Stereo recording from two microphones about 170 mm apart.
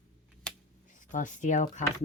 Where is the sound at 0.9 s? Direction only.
50° left (ahead or behind).